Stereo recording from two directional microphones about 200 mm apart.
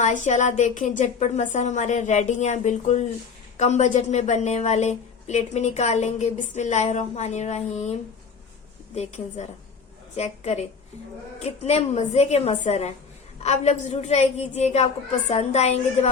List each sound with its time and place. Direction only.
0.0 s a woman's voice: 40° left (ahead or behind)
9.0 s a woman's voice: 35° left (ahead or behind)